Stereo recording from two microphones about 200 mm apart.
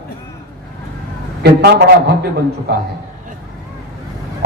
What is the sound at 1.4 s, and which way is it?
Speech, 55° right (ahead or behind).